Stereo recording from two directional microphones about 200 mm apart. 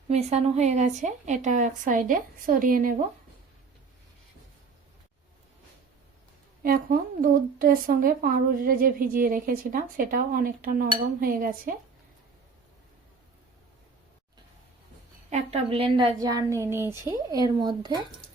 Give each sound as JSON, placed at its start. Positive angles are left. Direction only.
{"t": 0.1, "sound": "a woman's voice", "side_deg": -30}
{"t": 6.6, "sound": "speech", "side_deg": -45}
{"t": 15.3, "sound": "a woman's voice", "side_deg": -30}